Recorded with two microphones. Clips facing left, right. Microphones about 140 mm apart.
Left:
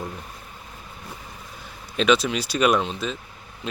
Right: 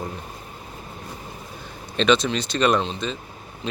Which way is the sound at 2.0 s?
5° left (ahead or behind).